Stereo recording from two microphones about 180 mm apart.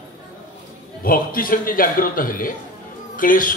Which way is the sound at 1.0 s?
50° left (ahead or behind).